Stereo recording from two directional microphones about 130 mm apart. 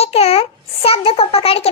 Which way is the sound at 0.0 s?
50° left (ahead or behind).